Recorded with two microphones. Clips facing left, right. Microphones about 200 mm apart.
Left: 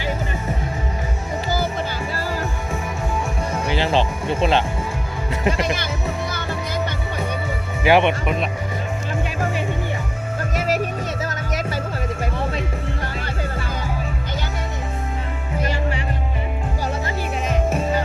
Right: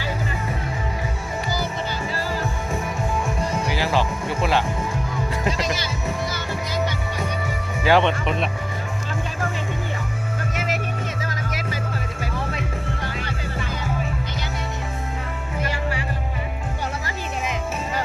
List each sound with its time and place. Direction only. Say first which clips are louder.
3.7 s music: left 5 dB; 25° left (ahead or behind)
5.5 s music: left 5 dB; 55° left (ahead or behind)
7.9 s music: left 2 dB; 15° left (ahead or behind)
10.5 s music: left 7 dB; 40° left (ahead or behind)